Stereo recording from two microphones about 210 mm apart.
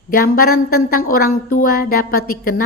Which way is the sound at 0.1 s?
45° left (ahead or behind).